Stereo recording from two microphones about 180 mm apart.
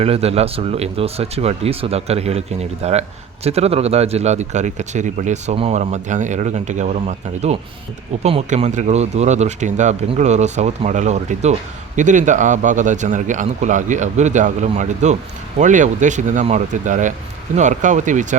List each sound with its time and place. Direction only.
0.0 s a man's voice: 35° right (ahead or behind)